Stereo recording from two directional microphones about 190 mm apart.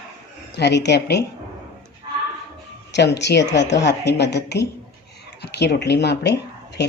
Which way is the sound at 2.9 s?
65° left (ahead or behind).